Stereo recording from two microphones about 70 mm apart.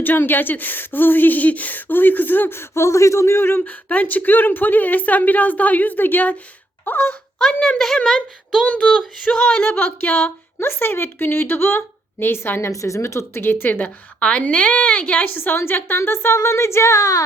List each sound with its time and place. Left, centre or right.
0.0 s speech: left
3.8 s speech: left
7.3 s a woman's voice: centre
8.6 s a woman's voice: centre
9.6 s a woman's voice: left
14.2 s a woman's voice: centre
15.4 s a woman's voice: left